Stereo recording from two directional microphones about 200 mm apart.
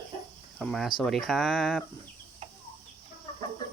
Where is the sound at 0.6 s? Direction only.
Centre (ahead or behind).